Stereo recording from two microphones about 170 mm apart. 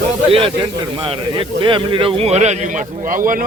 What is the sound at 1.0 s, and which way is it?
Speech, 30° right (ahead or behind).